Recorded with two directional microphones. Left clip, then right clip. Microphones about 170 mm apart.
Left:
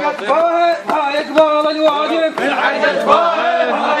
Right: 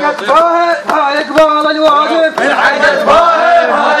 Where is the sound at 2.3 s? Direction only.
35° right (ahead or behind).